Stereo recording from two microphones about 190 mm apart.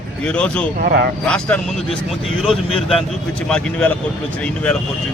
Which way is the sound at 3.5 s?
5° left (ahead or behind).